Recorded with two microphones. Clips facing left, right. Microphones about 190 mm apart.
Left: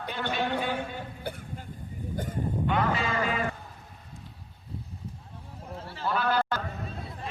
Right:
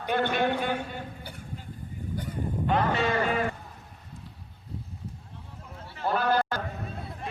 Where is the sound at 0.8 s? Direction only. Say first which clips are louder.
Left 1 dB; 55° left (ahead or behind).